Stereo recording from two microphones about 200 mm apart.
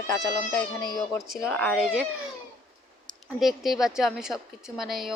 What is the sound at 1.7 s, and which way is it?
Speech, 5° right (ahead or behind).